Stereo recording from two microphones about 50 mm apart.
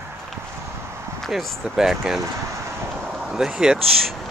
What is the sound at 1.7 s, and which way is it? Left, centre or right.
Speech, centre.